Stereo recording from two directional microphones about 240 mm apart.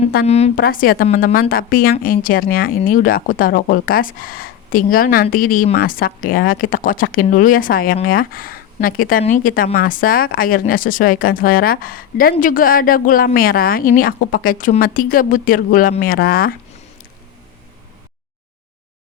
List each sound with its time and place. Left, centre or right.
0.3 s a woman's voice: left
0.6 s speech: left